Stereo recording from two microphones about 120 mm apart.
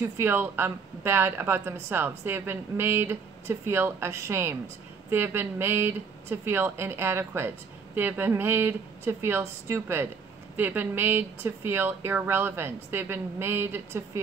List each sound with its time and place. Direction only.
0.2 s a woman's voice: 20° right (ahead or behind)